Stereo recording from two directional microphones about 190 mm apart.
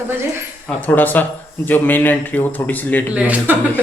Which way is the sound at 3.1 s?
10° right (ahead or behind).